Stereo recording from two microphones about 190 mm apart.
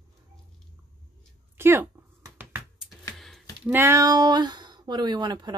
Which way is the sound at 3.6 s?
10° right (ahead or behind).